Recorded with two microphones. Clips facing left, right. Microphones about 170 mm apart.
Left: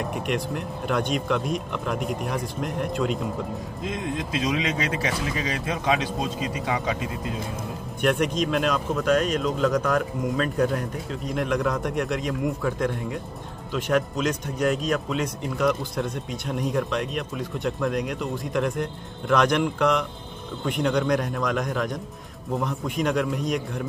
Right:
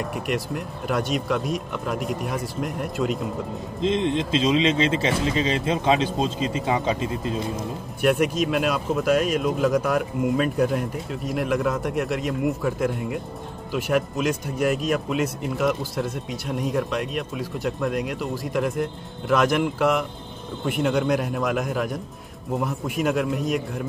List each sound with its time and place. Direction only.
0.0 s speech: centre (ahead or behind)
3.8 s speech: 25° right (ahead or behind)
8.0 s speech: 5° right (ahead or behind)